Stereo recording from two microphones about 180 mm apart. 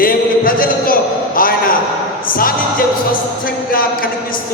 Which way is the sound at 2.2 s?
50° left (ahead or behind).